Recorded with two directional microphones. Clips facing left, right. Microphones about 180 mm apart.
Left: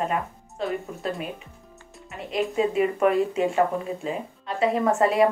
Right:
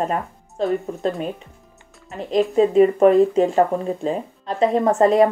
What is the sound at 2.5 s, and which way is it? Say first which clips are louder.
Speech: right 9 dB; 35° right (ahead or behind).